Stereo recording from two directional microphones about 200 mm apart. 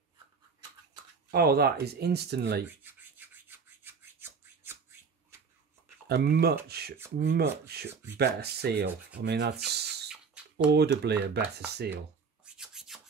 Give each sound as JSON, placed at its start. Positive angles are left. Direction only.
{"t": 1.3, "sound": "speech", "side_deg": -50}
{"t": 2.8, "sound": "rub", "side_deg": -10}
{"t": 6.0, "sound": "speech", "side_deg": -55}
{"t": 7.9, "sound": "speech", "side_deg": -10}
{"t": 8.2, "sound": "speech", "side_deg": -55}
{"t": 10.0, "sound": "a sound", "side_deg": -5}
{"t": 10.7, "sound": "speech", "side_deg": -55}
{"t": 12.5, "sound": "rub", "side_deg": 0}